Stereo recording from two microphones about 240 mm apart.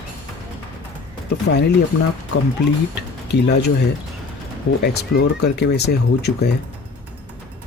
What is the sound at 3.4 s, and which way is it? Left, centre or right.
Speech, left.